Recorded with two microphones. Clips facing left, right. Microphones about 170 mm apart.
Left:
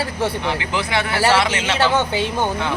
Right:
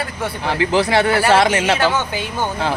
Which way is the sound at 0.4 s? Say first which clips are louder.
Right 6 dB; 35° right (ahead or behind).